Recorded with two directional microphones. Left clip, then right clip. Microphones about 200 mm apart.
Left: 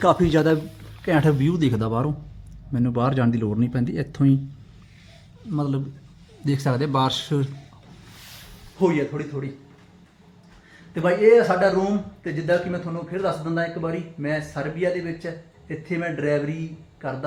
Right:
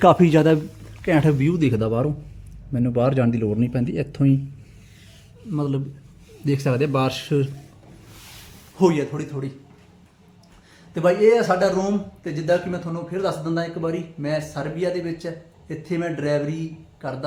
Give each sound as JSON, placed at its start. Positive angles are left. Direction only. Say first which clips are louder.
{"t": 0.0, "sound": "a man's voice", "louder": "right 3 dB", "side_deg": -25}
{"t": 1.0, "sound": "speech", "louder": "right 1 dB", "side_deg": -5}
{"t": 5.5, "sound": "speech", "louder": "right 1 dB", "side_deg": 0}
{"t": 8.8, "sound": "a man's voice", "louder": "right 2 dB", "side_deg": -25}
{"t": 10.9, "sound": "a man's voice", "louder": "left 1 dB", "side_deg": -10}